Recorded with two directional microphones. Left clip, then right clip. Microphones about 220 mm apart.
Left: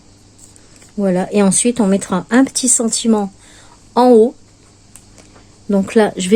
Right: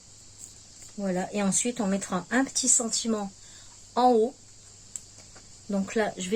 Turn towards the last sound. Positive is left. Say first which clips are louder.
# left 14 dB
turn(degrees=50)  # may be behind; listen again after turning